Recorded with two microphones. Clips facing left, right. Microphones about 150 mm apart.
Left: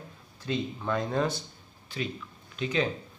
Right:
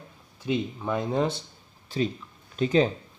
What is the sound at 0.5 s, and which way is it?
Speech, 15° right (ahead or behind).